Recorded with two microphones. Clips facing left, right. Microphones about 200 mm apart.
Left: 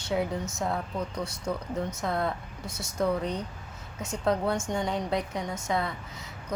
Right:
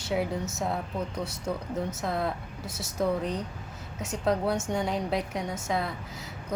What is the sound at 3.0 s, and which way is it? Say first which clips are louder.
A woman's voice: even; centre (ahead or behind).